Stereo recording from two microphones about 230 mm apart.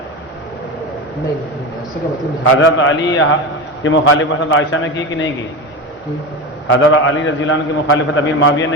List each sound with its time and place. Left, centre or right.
2.4 s a man's voice: left
6.7 s a man's voice: left